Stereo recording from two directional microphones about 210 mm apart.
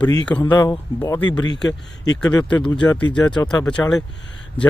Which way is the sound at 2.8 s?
5° left (ahead or behind).